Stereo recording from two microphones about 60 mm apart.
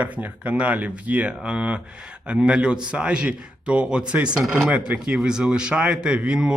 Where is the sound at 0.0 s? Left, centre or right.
Right.